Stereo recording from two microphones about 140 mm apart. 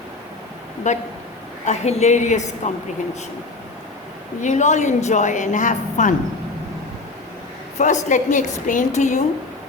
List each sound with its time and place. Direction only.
0.9 s a woman's voice: 55° left (ahead or behind)
4.4 s a woman's voice: 60° left (ahead or behind)
7.8 s a woman's voice: 60° left (ahead or behind)